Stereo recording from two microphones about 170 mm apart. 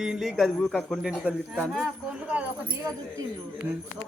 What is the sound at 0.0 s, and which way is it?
A man's voice, centre (ahead or behind).